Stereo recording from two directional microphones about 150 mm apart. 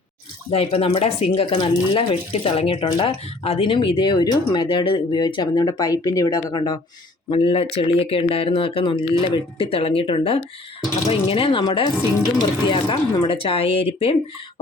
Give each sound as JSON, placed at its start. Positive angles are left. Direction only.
{"t": 0.5, "sound": "speech", "side_deg": 40}